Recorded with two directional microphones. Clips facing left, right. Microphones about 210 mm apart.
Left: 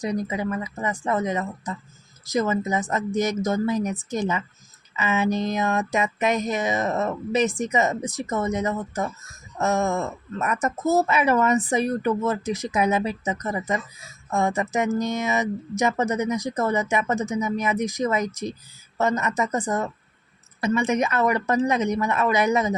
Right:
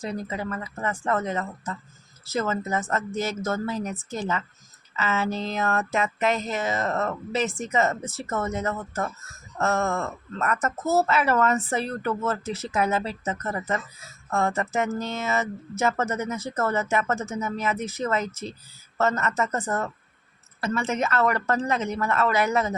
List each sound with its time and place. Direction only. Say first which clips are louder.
0.0 s speech: left 5 dB; 15° left (ahead or behind)